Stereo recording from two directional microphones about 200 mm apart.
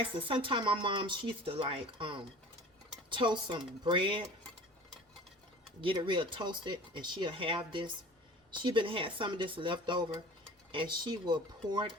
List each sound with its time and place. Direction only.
0.2 s speech: 25° right (ahead or behind)
5.8 s speech: 25° right (ahead or behind)